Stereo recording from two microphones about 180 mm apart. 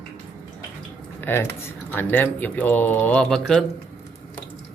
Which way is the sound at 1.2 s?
10° left (ahead or behind).